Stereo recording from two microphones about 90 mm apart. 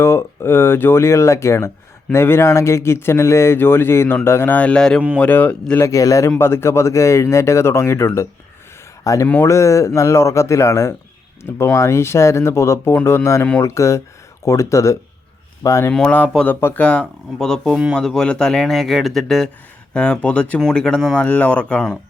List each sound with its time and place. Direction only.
0.0 s speech: 30° left (ahead or behind)
5.8 s speech: 40° left (ahead or behind)
6.4 s speech: 25° left (ahead or behind)
15.9 s speech: 5° left (ahead or behind)
21.2 s speech: 15° left (ahead or behind)